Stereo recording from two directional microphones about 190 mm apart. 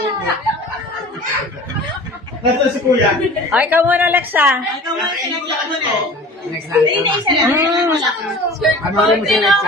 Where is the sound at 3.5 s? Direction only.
10° right (ahead or behind).